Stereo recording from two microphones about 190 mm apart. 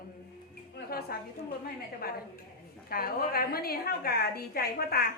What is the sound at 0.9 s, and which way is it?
Speech, 55° left (ahead or behind).